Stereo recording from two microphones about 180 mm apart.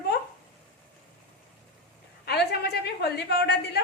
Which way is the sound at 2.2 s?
65° left (ahead or behind).